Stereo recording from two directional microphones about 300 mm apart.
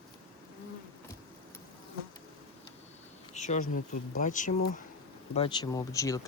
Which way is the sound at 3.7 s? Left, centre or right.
Left.